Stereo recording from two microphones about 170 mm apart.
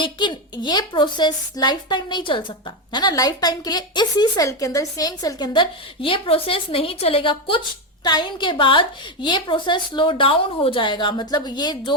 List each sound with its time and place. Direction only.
0.0 s a woman's voice: 25° left (ahead or behind)